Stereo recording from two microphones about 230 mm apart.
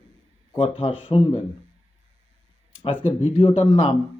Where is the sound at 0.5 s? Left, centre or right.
Left.